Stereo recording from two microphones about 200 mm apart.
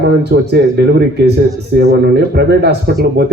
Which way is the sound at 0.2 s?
55° right (ahead or behind).